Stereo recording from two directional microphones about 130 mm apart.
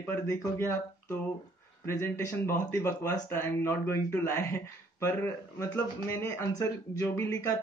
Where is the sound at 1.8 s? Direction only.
20° left (ahead or behind).